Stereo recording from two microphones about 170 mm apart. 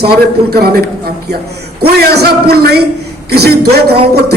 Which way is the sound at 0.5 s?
65° right (ahead or behind).